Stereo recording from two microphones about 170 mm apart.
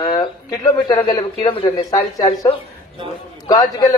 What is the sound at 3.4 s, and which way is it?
Speech, 20° left (ahead or behind).